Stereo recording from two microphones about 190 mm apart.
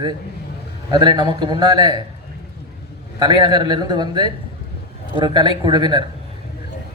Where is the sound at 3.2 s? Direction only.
20° right (ahead or behind).